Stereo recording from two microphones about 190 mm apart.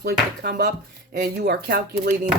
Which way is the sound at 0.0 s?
55° right (ahead or behind).